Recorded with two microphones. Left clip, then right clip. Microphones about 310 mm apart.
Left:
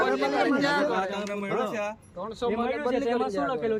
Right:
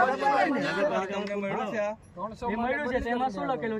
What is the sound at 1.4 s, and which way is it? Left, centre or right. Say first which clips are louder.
Speech: left 2 dB; centre.